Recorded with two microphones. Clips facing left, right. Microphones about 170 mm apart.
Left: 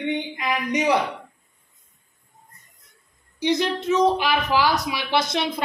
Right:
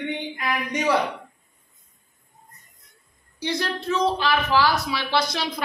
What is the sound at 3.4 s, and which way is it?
A man's voice, 20° left (ahead or behind).